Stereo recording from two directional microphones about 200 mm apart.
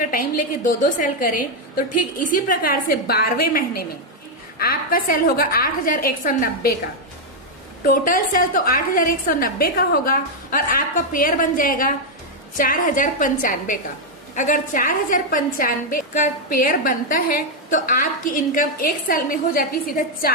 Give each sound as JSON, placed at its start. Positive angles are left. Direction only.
{"t": 0.1, "sound": "a woman's voice", "side_deg": 45}
{"t": 7.9, "sound": "a woman's voice", "side_deg": 45}